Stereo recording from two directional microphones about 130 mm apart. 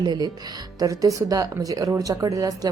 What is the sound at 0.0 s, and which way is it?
Speech, 35° right (ahead or behind).